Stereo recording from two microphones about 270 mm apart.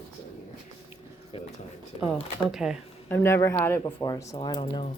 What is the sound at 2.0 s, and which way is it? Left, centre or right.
Speech, centre.